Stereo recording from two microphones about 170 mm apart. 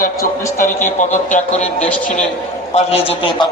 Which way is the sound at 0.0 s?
50° left (ahead or behind).